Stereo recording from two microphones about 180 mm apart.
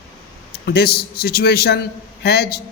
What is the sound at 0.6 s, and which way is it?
A man's voice, 60° left (ahead or behind).